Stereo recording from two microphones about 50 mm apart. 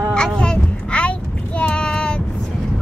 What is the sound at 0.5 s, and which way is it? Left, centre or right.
Child singing, left.